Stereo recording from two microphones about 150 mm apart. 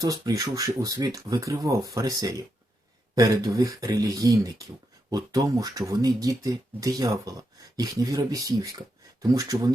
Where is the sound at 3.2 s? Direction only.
20° right (ahead or behind).